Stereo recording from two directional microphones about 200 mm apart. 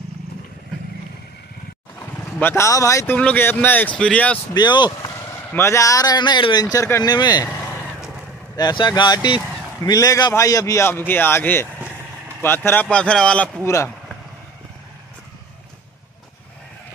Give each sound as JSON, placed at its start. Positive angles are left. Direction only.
{"t": 2.4, "sound": "a man's voice", "side_deg": 15}
{"t": 4.6, "sound": "speech", "side_deg": 20}
{"t": 8.5, "sound": "a man's voice", "side_deg": 20}